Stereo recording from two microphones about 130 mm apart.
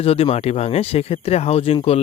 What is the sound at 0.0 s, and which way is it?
Speech, 50° left (ahead or behind).